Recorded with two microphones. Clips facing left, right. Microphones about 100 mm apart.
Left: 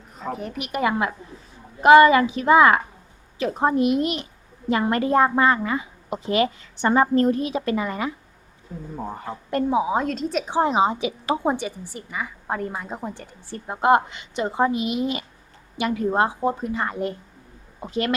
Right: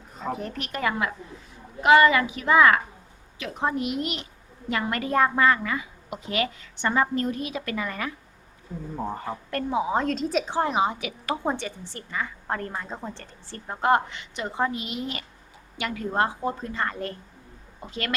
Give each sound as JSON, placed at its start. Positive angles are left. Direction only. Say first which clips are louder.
{"t": 0.2, "sound": "a woman's voice", "louder": "left 1 dB", "side_deg": 0}
{"t": 9.0, "sound": "a woman's voice", "louder": "right 1 dB", "side_deg": 0}
{"t": 9.5, "sound": "a woman's voice", "louder": "left 5 dB", "side_deg": 20}
{"t": 9.9, "sound": "a woman's voice", "louder": "left 1 dB", "side_deg": 5}
{"t": 10.5, "sound": "a woman's voice", "louder": "left 7 dB", "side_deg": 20}
{"t": 11.5, "sound": "a woman's voice", "louder": "left 4 dB", "side_deg": 10}